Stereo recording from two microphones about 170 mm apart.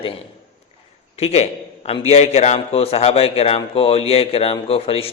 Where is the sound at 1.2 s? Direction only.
40° left (ahead or behind).